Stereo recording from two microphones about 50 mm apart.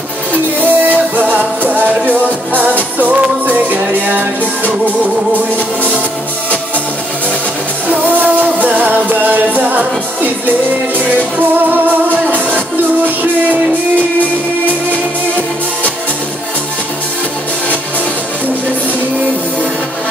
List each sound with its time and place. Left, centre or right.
0.6 s music: right
7.9 s music: right
13.2 s music: right